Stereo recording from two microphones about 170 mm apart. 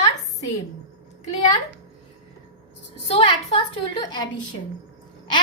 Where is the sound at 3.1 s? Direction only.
30° left (ahead or behind).